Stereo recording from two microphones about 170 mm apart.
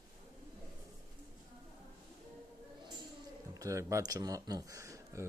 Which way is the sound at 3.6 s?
20° right (ahead or behind).